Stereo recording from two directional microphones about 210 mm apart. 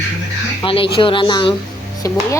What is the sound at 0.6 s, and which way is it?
Speech, 25° left (ahead or behind).